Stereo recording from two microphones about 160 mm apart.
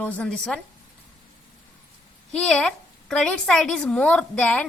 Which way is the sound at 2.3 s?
5° left (ahead or behind).